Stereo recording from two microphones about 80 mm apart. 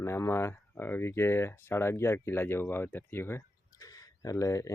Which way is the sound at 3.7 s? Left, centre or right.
Left.